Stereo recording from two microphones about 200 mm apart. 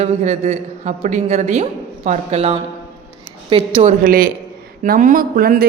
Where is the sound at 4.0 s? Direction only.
45° right (ahead or behind).